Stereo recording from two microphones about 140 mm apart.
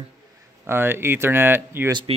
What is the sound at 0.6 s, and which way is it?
Speech, 15° right (ahead or behind).